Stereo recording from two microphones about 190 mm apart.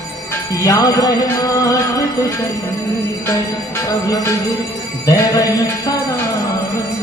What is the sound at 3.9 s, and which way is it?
Music, 20° left (ahead or behind).